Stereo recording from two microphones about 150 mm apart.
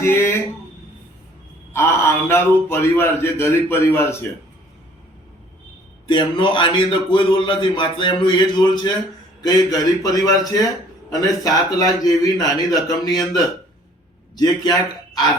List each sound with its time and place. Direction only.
0.0 s a man's voice: 15° left (ahead or behind)
1.7 s a man's voice: 15° left (ahead or behind)
6.1 s a man's voice: 30° left (ahead or behind)